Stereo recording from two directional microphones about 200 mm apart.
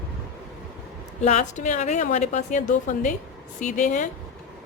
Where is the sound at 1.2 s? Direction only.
35° left (ahead or behind).